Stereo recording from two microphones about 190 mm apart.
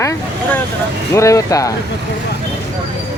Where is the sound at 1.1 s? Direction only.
15° left (ahead or behind).